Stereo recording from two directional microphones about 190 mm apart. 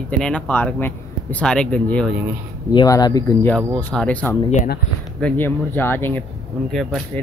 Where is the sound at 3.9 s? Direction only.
5° left (ahead or behind).